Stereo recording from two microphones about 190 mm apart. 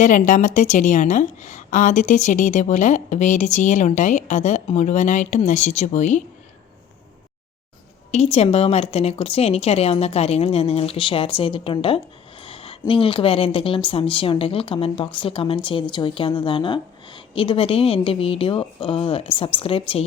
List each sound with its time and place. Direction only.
0.0 s a woman's voice: 45° left (ahead or behind)
8.1 s a woman's voice: 35° left (ahead or behind)